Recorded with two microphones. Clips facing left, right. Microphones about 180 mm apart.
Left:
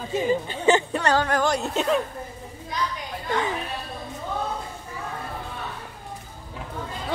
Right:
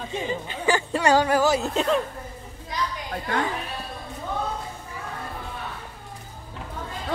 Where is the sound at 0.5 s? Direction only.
25° left (ahead or behind).